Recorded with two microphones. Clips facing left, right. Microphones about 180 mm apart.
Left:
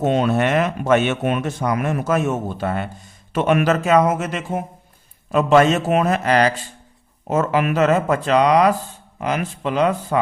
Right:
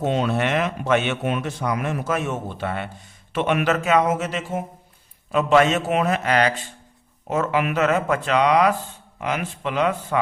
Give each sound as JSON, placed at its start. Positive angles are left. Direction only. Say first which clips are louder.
{"t": 0.0, "sound": "a man's voice", "louder": "left 4 dB", "side_deg": 50}